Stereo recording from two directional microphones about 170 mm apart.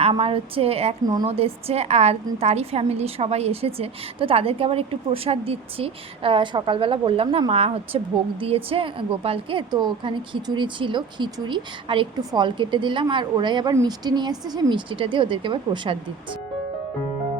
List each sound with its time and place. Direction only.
0.0 s a woman's voice: 35° right (ahead or behind)
1.0 s a woman's voice: 25° right (ahead or behind)
1.3 s a woman's voice: 35° right (ahead or behind)